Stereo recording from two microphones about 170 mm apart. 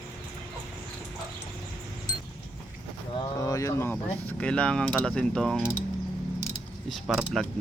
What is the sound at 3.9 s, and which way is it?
Speech, 5° left (ahead or behind).